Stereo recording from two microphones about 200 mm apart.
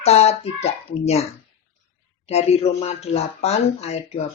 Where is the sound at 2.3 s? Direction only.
30° left (ahead or behind).